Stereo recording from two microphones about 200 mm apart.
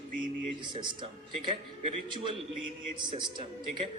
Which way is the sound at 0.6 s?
25° right (ahead or behind).